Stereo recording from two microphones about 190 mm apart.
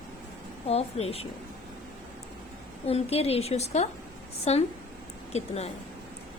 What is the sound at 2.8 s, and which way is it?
A woman's voice, 30° left (ahead or behind).